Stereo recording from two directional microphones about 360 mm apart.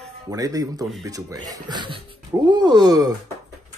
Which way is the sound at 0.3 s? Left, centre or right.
Centre.